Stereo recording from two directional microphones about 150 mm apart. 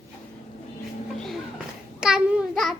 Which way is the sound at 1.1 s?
5° left (ahead or behind).